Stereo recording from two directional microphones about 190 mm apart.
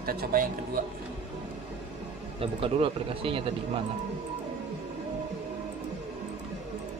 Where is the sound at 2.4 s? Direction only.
30° right (ahead or behind).